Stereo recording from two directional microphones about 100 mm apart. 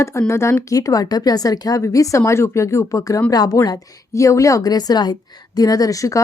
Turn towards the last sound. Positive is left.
turn(degrees=35)  # may be behind; listen again after turning